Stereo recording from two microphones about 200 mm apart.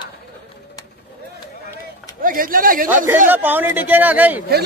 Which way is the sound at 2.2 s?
45° right (ahead or behind).